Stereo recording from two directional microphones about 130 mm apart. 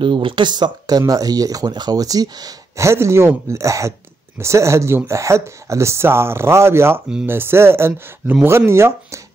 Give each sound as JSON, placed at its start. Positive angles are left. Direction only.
{"t": 0.0, "sound": "speech", "side_deg": -40}